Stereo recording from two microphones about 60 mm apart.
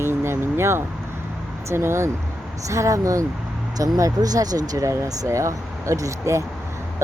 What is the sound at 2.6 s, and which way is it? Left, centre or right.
Speech, right.